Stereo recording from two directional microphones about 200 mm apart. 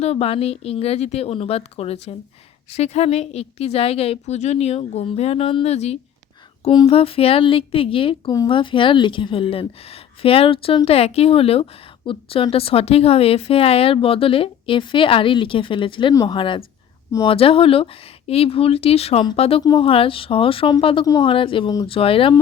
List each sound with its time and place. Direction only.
0.0 s a woman's voice: 30° left (ahead or behind)